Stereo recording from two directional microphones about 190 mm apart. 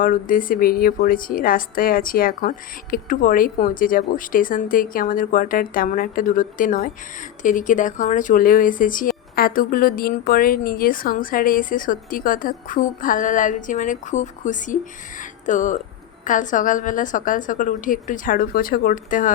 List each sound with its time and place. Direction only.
0.0 s speech: 45° left (ahead or behind)